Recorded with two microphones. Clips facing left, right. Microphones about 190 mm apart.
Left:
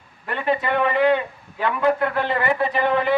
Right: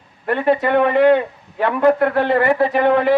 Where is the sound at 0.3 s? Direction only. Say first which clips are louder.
Right 6 dB; 50° right (ahead or behind).